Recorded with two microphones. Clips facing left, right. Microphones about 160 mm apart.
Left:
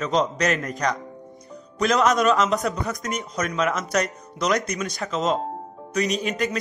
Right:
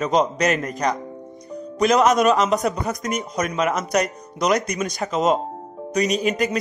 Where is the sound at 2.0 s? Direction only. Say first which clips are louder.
Right 1 dB; centre (ahead or behind).